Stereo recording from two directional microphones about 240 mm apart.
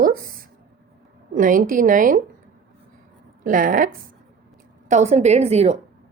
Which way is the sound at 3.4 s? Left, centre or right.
Right.